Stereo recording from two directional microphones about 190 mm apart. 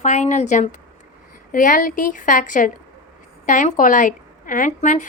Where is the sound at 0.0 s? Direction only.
40° left (ahead or behind).